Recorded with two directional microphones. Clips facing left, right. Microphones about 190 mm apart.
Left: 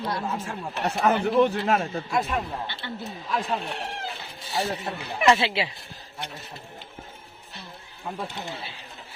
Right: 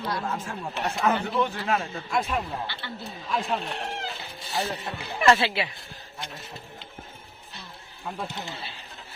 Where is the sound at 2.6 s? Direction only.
20° left (ahead or behind).